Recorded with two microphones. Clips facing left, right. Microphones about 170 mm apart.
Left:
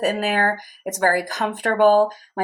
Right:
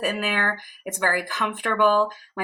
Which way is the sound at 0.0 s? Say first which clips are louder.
Left 5 dB; 40° left (ahead or behind).